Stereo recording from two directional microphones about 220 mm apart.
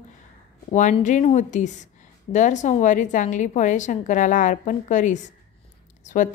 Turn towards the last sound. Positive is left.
turn(degrees=35)  # may be behind; listen again after turning